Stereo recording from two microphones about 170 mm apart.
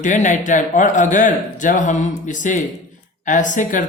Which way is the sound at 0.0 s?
45° left (ahead or behind).